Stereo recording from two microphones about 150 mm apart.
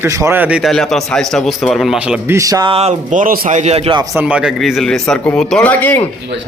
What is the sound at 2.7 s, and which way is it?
Speech, 45° right (ahead or behind).